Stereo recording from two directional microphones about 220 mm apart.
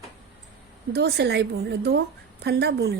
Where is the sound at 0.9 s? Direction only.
50° right (ahead or behind).